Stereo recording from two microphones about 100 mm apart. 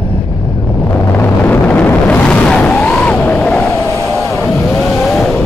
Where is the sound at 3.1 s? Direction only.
15° left (ahead or behind).